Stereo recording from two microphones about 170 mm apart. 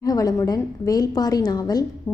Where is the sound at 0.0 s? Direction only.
20° left (ahead or behind).